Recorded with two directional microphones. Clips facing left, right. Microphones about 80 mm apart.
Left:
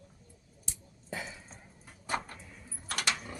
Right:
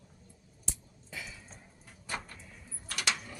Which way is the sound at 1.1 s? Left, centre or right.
Left.